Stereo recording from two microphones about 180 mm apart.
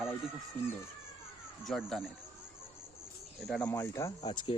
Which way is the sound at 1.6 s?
Centre (ahead or behind).